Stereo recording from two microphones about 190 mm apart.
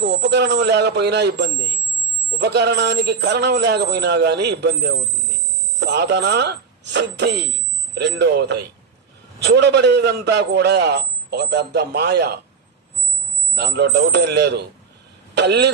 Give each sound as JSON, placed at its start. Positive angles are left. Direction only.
{"t": 0.0, "sound": "a man's voice", "side_deg": -65}
{"t": 13.6, "sound": "a man's voice", "side_deg": -60}